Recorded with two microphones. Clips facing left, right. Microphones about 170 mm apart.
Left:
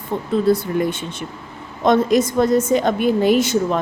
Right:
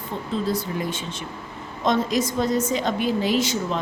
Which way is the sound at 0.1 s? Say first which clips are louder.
Left 8 dB; 55° left (ahead or behind).